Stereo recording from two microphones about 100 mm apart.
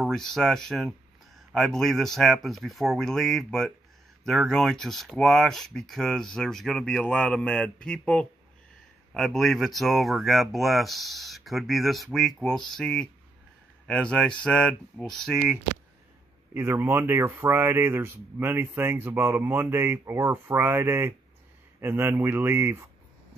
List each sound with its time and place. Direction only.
0.1 s speech: 5° left (ahead or behind)
16.5 s speech: 25° right (ahead or behind)